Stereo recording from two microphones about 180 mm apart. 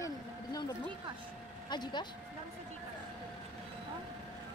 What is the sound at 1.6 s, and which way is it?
Speech, 25° left (ahead or behind).